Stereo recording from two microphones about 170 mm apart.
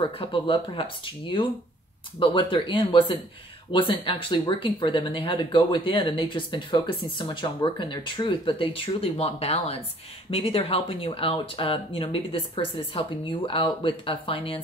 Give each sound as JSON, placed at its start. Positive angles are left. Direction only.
{"t": 0.0, "sound": "speech", "side_deg": 25}